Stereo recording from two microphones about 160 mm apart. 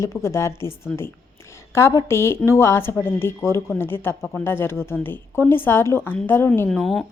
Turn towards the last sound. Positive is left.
turn(degrees=0)  # may be behind; listen again after turning